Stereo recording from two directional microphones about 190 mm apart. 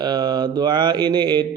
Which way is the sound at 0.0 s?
20° right (ahead or behind).